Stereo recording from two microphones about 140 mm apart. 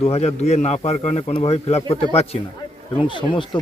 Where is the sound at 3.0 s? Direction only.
35° left (ahead or behind).